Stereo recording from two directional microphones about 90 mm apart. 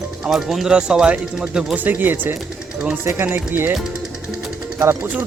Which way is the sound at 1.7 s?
20° right (ahead or behind).